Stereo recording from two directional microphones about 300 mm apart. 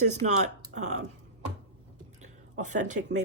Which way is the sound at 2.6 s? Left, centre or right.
Right.